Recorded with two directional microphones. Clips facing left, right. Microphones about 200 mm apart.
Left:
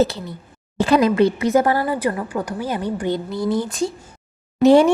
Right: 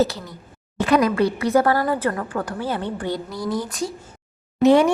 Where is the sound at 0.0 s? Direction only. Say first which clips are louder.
Left 2 dB; 25° left (ahead or behind).